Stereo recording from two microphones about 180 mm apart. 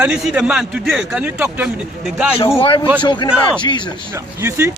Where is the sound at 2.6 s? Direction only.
30° left (ahead or behind).